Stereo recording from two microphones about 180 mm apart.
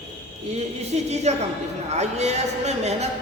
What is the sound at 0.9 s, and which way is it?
A man's voice, 40° right (ahead or behind).